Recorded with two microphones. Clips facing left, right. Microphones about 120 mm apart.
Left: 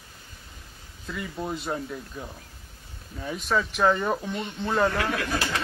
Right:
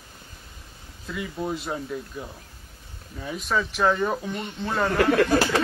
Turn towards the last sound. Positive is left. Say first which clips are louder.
# right 8 dB
turn(degrees=-45)  # may be behind; listen again after turning